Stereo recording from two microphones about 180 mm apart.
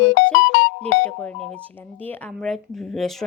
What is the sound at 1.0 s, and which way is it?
Speech, 5° left (ahead or behind).